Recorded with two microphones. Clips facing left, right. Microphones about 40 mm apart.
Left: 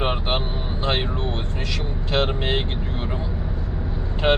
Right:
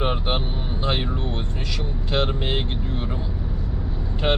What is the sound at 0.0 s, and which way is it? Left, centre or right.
Vehicle, left.